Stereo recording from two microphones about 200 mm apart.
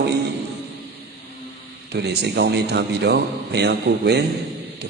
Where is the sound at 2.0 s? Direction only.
55° right (ahead or behind).